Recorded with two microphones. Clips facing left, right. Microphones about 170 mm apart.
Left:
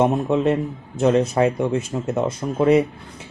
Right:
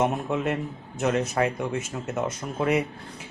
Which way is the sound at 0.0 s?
30° left (ahead or behind).